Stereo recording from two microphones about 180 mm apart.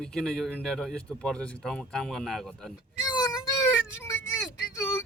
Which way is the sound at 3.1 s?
20° left (ahead or behind).